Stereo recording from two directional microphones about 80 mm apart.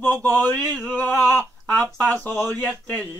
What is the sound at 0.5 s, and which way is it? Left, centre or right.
Speech, right.